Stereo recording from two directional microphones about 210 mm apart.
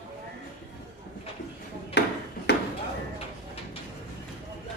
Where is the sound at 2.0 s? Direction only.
50° left (ahead or behind).